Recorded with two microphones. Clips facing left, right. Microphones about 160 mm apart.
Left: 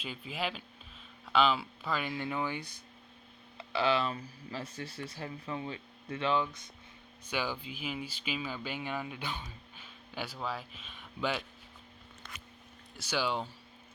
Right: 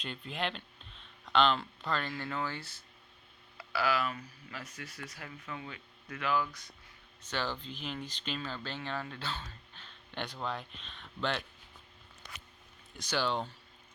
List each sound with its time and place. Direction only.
0.0 s speech: 5° left (ahead or behind); by 6.7 s 25° left (ahead or behind)
7.3 s speech: 10° left (ahead or behind)
13.0 s speech: 10° left (ahead or behind)